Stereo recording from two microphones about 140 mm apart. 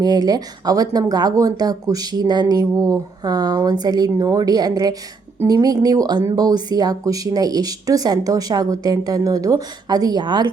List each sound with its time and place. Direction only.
0.0 s speech: 30° right (ahead or behind)